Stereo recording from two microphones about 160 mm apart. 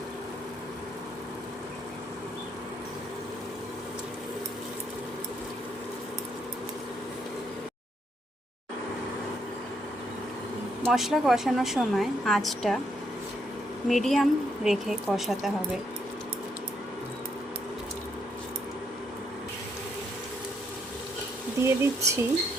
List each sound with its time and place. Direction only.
10.8 s a woman's voice: centre (ahead or behind)
13.8 s a woman's voice: centre (ahead or behind)
21.6 s speech: 15° right (ahead or behind)